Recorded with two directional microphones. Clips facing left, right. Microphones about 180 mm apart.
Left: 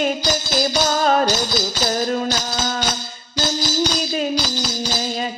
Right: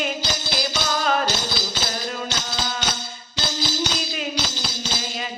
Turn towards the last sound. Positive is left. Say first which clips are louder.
# left 5 dB
turn(degrees=40)  # may be behind; listen again after turning